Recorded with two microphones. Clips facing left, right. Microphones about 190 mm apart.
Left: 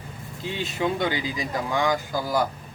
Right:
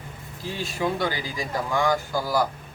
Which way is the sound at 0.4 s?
20° left (ahead or behind).